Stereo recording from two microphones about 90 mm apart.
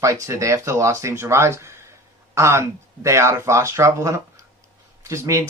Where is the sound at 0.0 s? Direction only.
35° right (ahead or behind).